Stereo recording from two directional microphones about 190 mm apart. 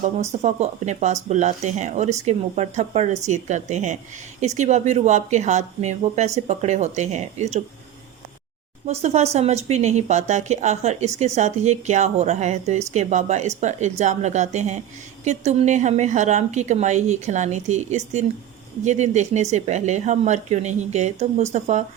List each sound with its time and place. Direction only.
0.0 s speech: 35° right (ahead or behind)
8.9 s speech: 35° right (ahead or behind)